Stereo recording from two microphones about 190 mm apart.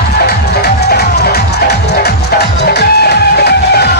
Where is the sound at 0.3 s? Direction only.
55° left (ahead or behind).